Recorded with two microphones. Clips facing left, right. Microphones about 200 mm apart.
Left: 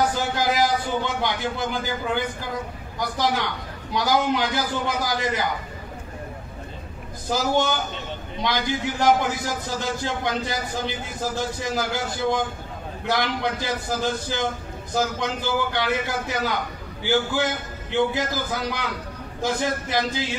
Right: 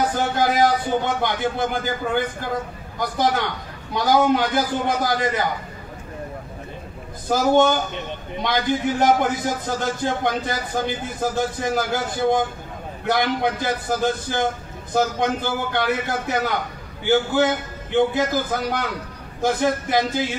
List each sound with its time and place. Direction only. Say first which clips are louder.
0.1 s a man's voice: right 3 dB; 55° right (ahead or behind)
7.2 s a man's voice: right 6 dB; 50° right (ahead or behind)